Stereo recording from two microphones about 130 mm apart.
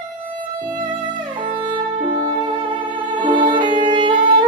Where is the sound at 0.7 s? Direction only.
40° right (ahead or behind).